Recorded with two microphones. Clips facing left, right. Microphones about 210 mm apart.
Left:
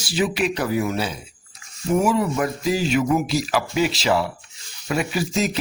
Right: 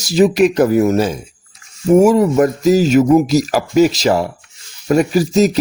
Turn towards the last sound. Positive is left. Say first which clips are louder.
# right 10 dB
turn(degrees=-40)  # may be behind; listen again after turning